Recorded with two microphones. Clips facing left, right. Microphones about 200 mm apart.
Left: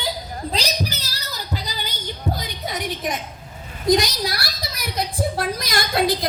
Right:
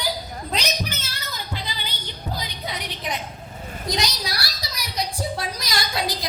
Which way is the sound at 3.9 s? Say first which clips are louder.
Left 9 dB; 50° left (ahead or behind).